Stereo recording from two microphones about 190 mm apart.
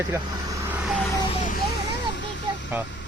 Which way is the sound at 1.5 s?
60° left (ahead or behind).